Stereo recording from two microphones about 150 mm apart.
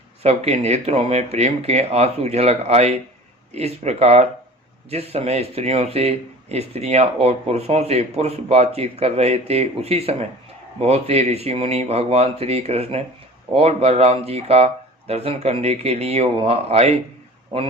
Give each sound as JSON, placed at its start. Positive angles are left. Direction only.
{"t": 0.2, "sound": "speech", "side_deg": -45}